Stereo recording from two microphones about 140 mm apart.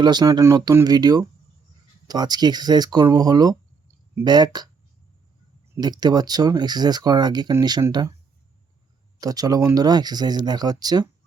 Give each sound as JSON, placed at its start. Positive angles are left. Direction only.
{"t": 0.0, "sound": "speech", "side_deg": -30}
{"t": 5.8, "sound": "speech", "side_deg": -30}
{"t": 9.2, "sound": "speech", "side_deg": -25}